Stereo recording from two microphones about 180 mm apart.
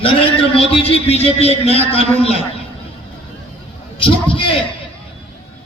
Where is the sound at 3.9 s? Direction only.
30° left (ahead or behind).